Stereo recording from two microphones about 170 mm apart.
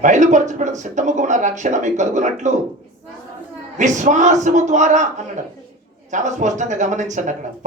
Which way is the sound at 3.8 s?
45° right (ahead or behind).